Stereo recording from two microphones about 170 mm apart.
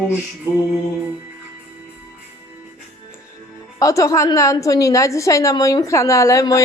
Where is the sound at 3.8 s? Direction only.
20° left (ahead or behind).